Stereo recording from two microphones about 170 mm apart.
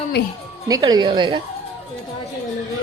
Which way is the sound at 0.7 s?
25° right (ahead or behind).